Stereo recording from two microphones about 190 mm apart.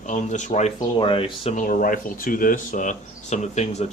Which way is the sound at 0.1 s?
40° left (ahead or behind).